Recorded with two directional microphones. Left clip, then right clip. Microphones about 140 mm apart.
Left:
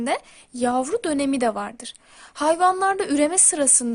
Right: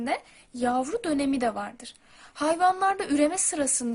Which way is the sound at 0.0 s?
45° left (ahead or behind).